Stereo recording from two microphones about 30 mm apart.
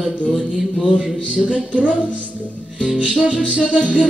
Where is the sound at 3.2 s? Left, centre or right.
Right.